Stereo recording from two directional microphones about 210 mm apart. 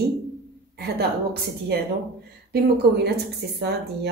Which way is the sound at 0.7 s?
50° right (ahead or behind).